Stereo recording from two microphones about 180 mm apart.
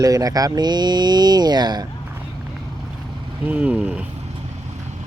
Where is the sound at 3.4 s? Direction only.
5° right (ahead or behind).